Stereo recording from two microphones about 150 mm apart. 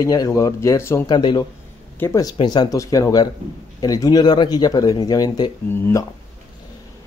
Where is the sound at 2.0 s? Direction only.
20° left (ahead or behind).